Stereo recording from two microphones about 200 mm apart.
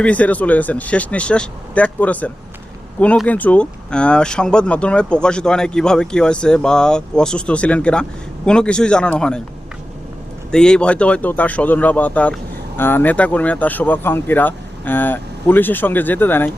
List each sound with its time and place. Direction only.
0.0 s speech: 5° left (ahead or behind)
10.5 s speech: 5° left (ahead or behind)